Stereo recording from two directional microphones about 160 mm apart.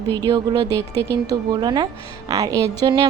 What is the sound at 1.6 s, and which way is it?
Speech, 25° right (ahead or behind).